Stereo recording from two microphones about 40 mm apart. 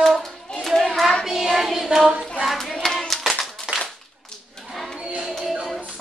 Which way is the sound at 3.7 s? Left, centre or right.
Right.